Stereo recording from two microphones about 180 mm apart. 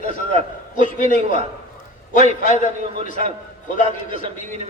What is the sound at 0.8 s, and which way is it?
Speech, 45° left (ahead or behind).